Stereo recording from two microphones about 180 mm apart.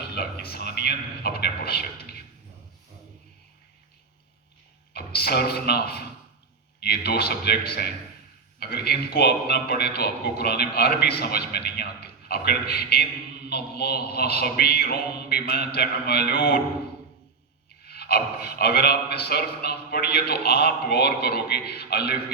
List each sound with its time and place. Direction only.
0.1 s a sound: 60° left (ahead or behind)
4.9 s a man's voice: 60° left (ahead or behind)
17.8 s a man's voice: 60° left (ahead or behind)